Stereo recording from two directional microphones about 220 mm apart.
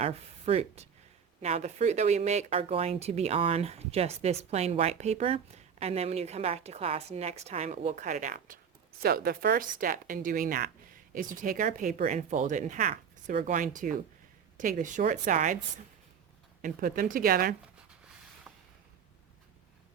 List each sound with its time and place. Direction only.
0.0 s speech: 30° right (ahead or behind)
16.6 s speech: 40° right (ahead or behind)
18.5 s a sound: 5° right (ahead or behind)